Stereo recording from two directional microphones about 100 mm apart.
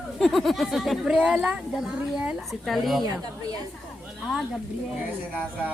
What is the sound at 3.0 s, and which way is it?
Speech, 40° right (ahead or behind).